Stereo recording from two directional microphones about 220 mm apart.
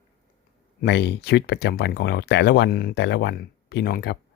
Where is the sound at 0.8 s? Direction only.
50° left (ahead or behind).